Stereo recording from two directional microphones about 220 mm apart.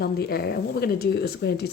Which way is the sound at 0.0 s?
45° left (ahead or behind).